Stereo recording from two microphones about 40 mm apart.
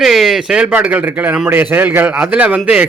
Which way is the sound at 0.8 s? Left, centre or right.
Right.